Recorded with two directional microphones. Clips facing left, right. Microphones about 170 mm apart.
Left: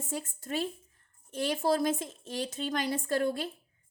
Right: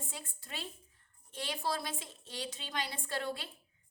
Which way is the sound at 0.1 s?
45° left (ahead or behind).